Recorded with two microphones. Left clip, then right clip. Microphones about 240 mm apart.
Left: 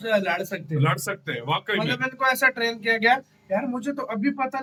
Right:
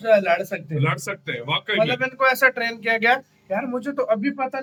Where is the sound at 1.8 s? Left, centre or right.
Centre.